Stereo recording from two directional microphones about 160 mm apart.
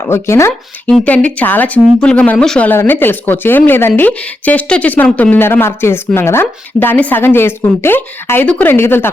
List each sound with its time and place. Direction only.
0.0 s speech: 15° left (ahead or behind)